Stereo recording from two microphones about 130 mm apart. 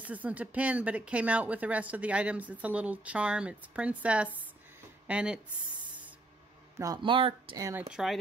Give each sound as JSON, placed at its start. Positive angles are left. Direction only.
{"t": 0.0, "sound": "speech", "side_deg": -10}
{"t": 6.8, "sound": "speech", "side_deg": -35}
{"t": 7.9, "sound": "speech", "side_deg": 0}